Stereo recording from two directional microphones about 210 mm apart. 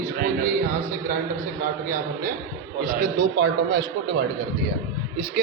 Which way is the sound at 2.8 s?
45° right (ahead or behind).